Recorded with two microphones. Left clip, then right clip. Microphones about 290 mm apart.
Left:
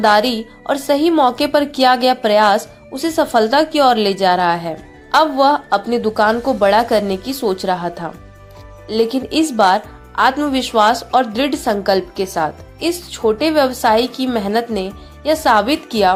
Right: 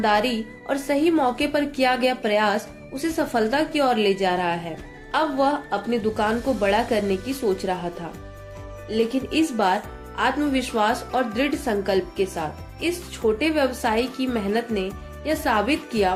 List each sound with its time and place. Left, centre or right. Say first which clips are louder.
0.0 s speech: left 8 dB; left
8.9 s speech: left 7 dB; left